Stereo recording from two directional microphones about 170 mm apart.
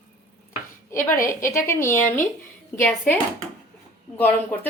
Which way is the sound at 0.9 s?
15° left (ahead or behind).